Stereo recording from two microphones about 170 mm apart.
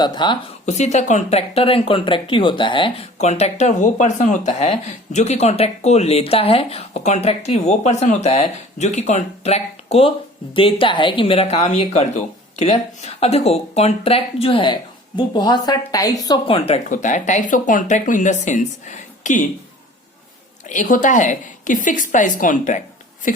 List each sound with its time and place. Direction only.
0.0 s speech: 25° left (ahead or behind)
0.6 s speech: 40° left (ahead or behind)
16.9 s speech: 45° left (ahead or behind)
20.7 s speech: 50° left (ahead or behind)